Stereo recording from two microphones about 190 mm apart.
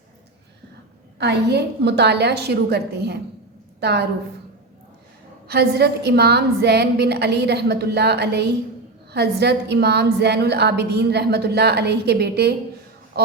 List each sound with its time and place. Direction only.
1.2 s a woman's voice: 60° right (ahead or behind)
5.5 s a woman's voice: 60° right (ahead or behind)
13.2 s a sound: 55° right (ahead or behind)